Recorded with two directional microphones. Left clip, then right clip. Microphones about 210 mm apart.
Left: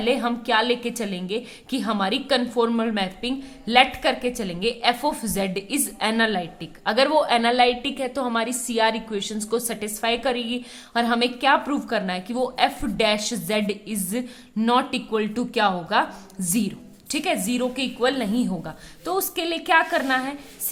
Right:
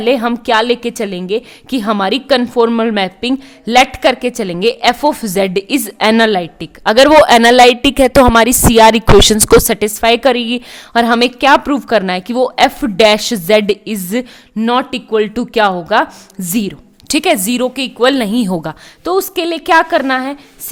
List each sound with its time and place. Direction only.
0.0 s a woman's voice: 40° right (ahead or behind)